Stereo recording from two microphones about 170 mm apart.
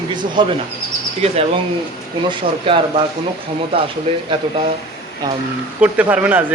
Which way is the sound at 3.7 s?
35° right (ahead or behind).